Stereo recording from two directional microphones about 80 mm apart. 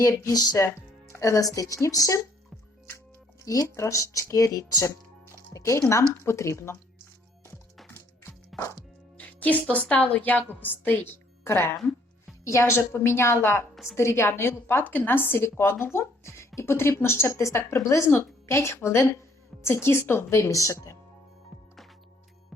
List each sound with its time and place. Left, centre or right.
0.0 s a woman's voice: left
7.9 s music: left
8.5 s music: centre
9.1 s a woman's voice: centre; by 20.9 s left